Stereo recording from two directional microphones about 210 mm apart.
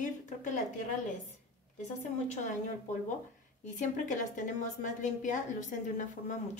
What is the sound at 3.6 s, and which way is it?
A woman's voice, 35° left (ahead or behind).